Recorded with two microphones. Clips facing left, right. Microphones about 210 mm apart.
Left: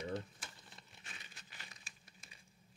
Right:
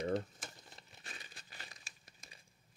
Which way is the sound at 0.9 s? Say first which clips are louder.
Right 5 dB; 40° right (ahead or behind).